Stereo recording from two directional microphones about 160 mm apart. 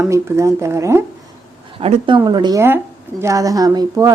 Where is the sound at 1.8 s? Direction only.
35° right (ahead or behind).